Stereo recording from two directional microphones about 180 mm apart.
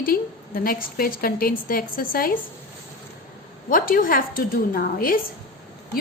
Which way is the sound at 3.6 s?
50° left (ahead or behind).